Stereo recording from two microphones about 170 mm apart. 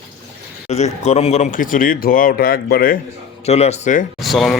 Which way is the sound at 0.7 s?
40° left (ahead or behind).